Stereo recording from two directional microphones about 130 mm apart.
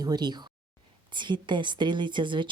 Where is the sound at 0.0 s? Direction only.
30° right (ahead or behind).